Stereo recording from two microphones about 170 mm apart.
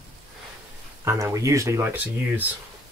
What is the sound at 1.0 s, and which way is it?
Speech, 15° right (ahead or behind).